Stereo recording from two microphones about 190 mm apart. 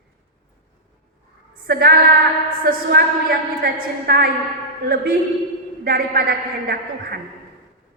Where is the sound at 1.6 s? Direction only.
55° right (ahead or behind).